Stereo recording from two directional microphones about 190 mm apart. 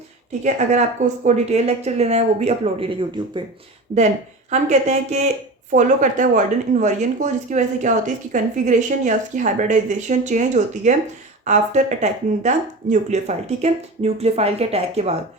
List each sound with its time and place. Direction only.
0.4 s speech: 40° right (ahead or behind)
4.5 s speech: 35° right (ahead or behind)